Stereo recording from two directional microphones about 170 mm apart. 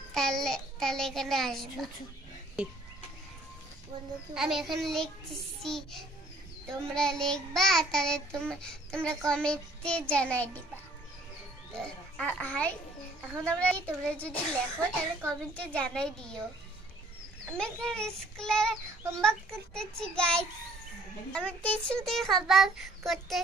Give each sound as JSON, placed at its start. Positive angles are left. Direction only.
{"t": 0.1, "sound": "a child's voice", "side_deg": 5}
{"t": 4.3, "sound": "a child's voice", "side_deg": 0}
{"t": 11.7, "sound": "a child's voice", "side_deg": 5}
{"t": 17.5, "sound": "a child's voice", "side_deg": 5}